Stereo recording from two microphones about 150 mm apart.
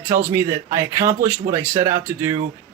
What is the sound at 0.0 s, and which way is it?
A man's voice, 15° right (ahead or behind).